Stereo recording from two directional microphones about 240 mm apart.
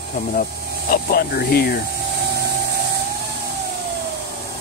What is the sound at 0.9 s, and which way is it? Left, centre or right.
Speech, left.